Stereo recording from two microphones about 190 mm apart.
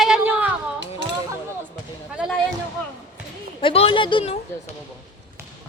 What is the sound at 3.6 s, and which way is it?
Speech, 30° left (ahead or behind).